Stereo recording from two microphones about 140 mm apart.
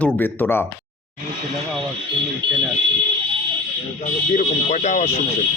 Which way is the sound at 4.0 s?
55° left (ahead or behind).